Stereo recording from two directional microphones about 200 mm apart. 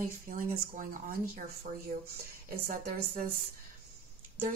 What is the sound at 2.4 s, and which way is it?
Speech, 50° right (ahead or behind).